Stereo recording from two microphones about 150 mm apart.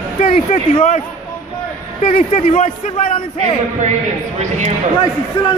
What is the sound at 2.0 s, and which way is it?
Speech, 45° left (ahead or behind).